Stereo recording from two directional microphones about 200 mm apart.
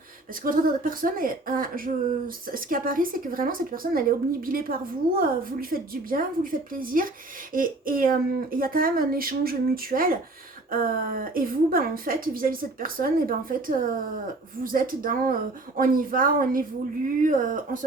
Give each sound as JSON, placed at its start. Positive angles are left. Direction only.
{"t": 0.4, "sound": "speech", "side_deg": -45}